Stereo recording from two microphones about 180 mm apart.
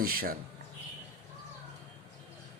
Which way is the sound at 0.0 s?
55° right (ahead or behind).